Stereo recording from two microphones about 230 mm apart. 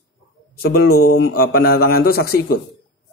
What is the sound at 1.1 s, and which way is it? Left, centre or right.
Mantra, left.